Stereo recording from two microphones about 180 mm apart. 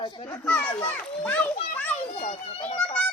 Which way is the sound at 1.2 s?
10° left (ahead or behind).